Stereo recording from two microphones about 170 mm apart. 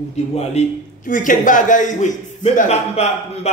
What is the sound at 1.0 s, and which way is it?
A man's voice, 50° left (ahead or behind).